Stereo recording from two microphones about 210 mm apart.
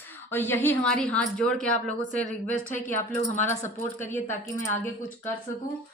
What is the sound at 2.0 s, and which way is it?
Speech, 35° right (ahead or behind).